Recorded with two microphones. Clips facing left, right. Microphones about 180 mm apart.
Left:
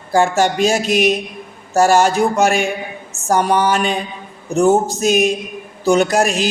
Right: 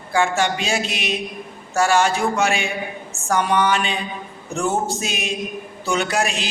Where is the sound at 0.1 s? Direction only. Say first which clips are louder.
Left 5 dB; 40° left (ahead or behind).